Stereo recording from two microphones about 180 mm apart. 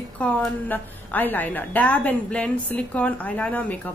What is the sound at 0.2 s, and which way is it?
A woman's voice, 10° left (ahead or behind).